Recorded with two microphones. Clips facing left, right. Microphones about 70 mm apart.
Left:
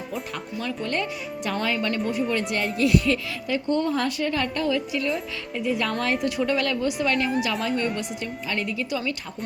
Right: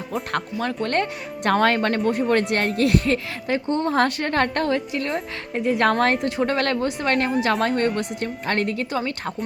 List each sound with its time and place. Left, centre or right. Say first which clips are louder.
0.1 s a woman's voice: right 9 dB; right
3.9 s a woman's voice: right 5 dB; right
6.2 s a woman's voice: right 2 dB; right